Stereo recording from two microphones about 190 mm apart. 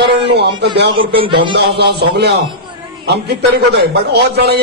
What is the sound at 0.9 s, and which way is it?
Speech, 25° right (ahead or behind).